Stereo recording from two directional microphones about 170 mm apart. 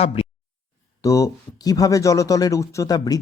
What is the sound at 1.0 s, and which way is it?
Speech, 20° left (ahead or behind).